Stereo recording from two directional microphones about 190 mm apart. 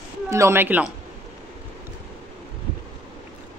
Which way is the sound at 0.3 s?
15° right (ahead or behind).